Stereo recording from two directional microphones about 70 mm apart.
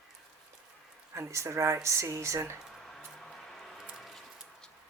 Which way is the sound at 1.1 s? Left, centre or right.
Right.